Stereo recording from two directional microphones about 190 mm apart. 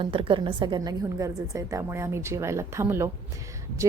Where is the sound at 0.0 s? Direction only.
25° right (ahead or behind).